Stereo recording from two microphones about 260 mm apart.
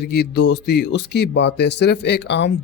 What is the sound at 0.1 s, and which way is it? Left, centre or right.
Speech, left.